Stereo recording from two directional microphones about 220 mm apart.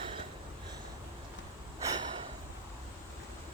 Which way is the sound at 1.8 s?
20° right (ahead or behind).